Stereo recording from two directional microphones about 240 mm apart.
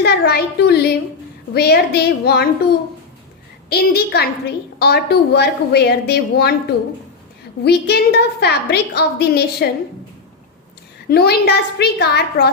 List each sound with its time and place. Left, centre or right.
0.0 s a woman's voice: left
3.7 s a woman's voice: left
7.6 s a woman's voice: left
11.1 s a woman's voice: left